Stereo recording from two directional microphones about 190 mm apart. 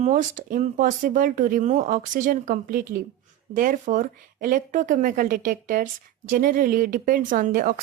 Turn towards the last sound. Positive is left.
turn(degrees=-50)  # may be behind; listen again after turning